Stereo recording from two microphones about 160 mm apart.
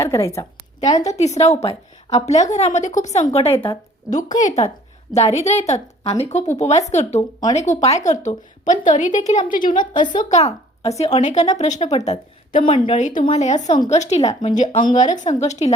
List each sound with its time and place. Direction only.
0.0 s a woman's voice: 20° left (ahead or behind)
1.1 s a woman's voice: 45° left (ahead or behind)
10.2 s a woman's voice: 45° left (ahead or behind)
12.6 s speech: 35° left (ahead or behind)
13.0 s a woman's voice: 50° left (ahead or behind)